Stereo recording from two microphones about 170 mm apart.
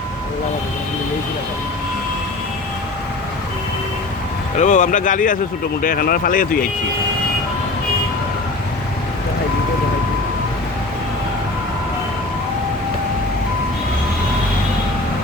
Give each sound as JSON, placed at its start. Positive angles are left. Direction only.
{"t": 4.5, "sound": "speech", "side_deg": 45}